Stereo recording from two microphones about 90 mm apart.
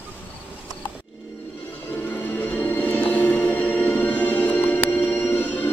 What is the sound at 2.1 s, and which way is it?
Music, 20° left (ahead or behind).